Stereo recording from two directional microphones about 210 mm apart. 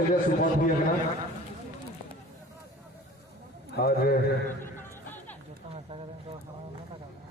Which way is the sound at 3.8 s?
45° left (ahead or behind).